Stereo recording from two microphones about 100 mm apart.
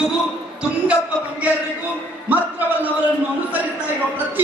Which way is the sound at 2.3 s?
15° right (ahead or behind).